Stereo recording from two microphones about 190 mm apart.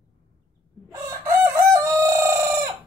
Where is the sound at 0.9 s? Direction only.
15° right (ahead or behind).